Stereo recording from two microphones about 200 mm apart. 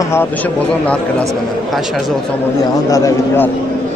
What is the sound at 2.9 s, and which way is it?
Speech, 15° left (ahead or behind).